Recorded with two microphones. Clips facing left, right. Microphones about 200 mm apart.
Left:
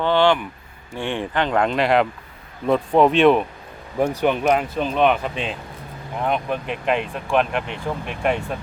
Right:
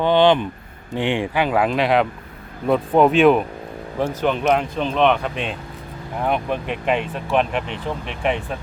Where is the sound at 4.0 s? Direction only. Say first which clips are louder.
Left 2 dB; 10° left (ahead or behind).